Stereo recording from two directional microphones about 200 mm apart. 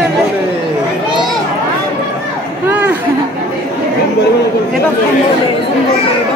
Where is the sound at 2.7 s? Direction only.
10° right (ahead or behind).